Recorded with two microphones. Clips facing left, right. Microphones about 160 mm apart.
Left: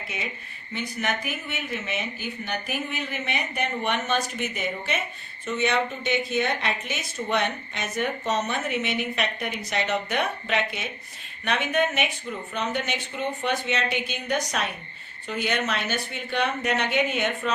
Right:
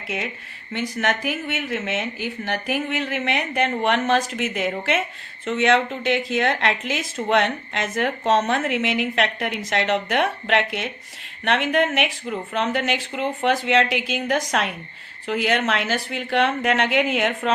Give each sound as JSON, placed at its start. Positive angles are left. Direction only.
{"t": 0.7, "sound": "a woman's voice", "side_deg": -85}